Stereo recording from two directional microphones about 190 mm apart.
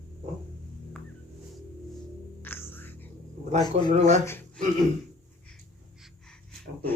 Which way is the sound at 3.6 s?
20° left (ahead or behind).